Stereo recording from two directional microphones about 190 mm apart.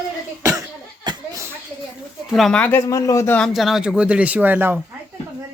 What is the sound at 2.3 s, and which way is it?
A man's voice, centre (ahead or behind).